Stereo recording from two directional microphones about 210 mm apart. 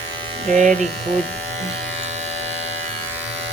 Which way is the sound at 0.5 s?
35° right (ahead or behind).